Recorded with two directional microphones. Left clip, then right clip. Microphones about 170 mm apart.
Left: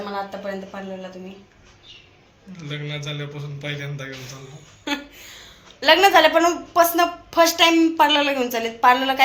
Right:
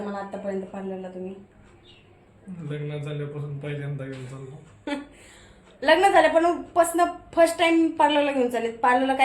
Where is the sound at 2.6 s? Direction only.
25° right (ahead or behind).